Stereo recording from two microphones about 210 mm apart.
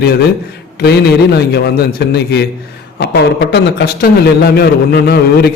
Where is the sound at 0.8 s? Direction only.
50° left (ahead or behind).